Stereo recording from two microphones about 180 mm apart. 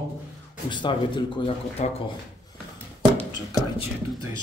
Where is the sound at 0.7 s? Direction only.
25° left (ahead or behind).